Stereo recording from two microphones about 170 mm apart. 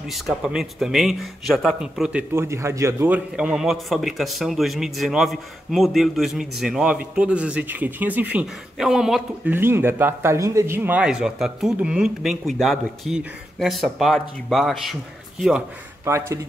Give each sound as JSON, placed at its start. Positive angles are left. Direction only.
{"t": 0.1, "sound": "speech", "side_deg": 0}
{"t": 16.1, "sound": "speech", "side_deg": -15}